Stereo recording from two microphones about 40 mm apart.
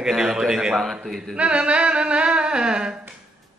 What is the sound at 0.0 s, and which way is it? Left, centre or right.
Speech, centre.